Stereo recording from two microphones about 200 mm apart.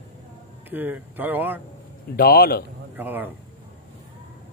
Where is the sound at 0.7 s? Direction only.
10° right (ahead or behind).